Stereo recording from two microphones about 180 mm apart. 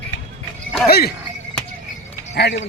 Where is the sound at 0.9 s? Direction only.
60° left (ahead or behind).